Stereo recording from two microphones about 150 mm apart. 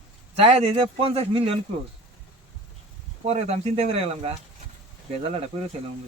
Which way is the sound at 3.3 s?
45° right (ahead or behind).